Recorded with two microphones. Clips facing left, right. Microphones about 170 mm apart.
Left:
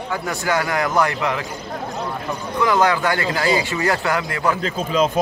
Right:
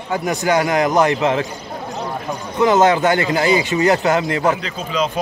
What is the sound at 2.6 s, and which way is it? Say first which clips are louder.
A man's voice: right 5 dB; 20° right (ahead or behind).